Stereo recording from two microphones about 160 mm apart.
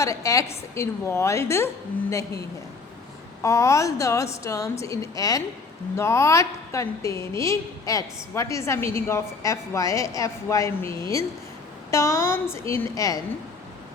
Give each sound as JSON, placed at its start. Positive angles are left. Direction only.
{"t": 0.0, "sound": "a woman's voice", "side_deg": 20}
{"t": 3.4, "sound": "a woman's voice", "side_deg": 20}